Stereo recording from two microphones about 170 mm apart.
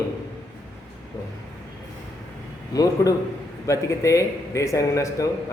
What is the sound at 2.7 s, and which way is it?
A man's voice, 20° left (ahead or behind).